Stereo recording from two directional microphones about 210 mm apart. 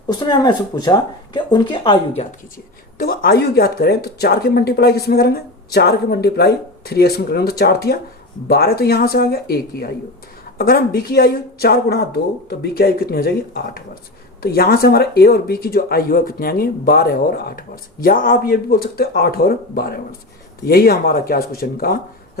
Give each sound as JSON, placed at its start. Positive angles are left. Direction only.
{"t": 0.1, "sound": "speech", "side_deg": 20}
{"t": 3.0, "sound": "speech", "side_deg": 45}